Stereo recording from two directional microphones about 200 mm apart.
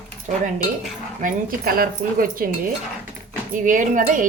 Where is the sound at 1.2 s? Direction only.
45° right (ahead or behind).